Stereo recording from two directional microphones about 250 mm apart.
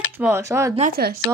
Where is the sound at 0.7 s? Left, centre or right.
Right.